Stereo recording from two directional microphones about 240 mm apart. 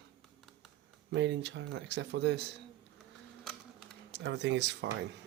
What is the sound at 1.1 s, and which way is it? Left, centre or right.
Speech, right.